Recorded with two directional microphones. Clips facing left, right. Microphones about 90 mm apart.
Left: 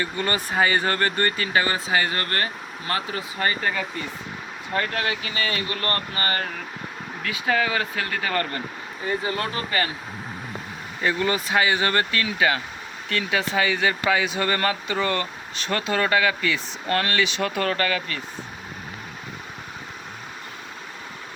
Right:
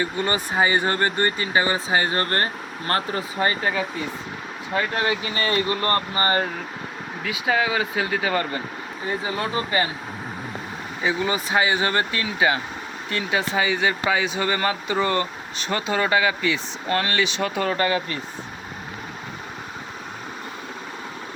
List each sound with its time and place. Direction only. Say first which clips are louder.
0.0 s speech: right 2 dB; 20° right (ahead or behind); by 3.2 s 40° right (ahead or behind)
3.3 s speech: right 2 dB; 20° right (ahead or behind)
4.9 s speech: right 3 dB; 25° right (ahead or behind)
7.2 s speech: right 1 dB; 10° right (ahead or behind)
11.0 s speech: even; 10° right (ahead or behind)
17.6 s speech: right 1 dB; 10° right (ahead or behind)
17.8 s speech: right 3 dB; 25° right (ahead or behind)